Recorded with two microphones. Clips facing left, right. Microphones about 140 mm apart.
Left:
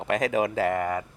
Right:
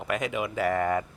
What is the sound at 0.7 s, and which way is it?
Speech, 25° left (ahead or behind).